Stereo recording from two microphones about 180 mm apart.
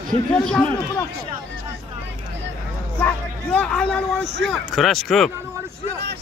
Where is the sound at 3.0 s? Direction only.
5° left (ahead or behind).